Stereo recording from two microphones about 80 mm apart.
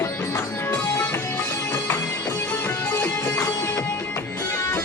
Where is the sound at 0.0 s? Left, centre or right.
Left.